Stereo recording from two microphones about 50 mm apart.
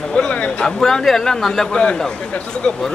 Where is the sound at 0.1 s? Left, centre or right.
Left.